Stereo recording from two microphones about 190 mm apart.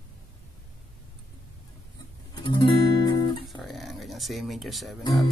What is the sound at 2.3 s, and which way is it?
Guitar, 25° left (ahead or behind).